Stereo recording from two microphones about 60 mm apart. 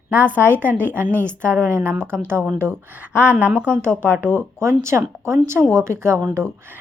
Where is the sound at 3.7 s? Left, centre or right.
Right.